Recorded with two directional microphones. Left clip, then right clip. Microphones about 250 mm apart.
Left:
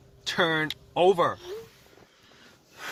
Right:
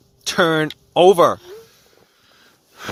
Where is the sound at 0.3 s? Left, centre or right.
Right.